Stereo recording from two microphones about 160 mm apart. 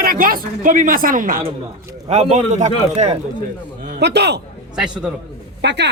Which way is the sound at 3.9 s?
90° right.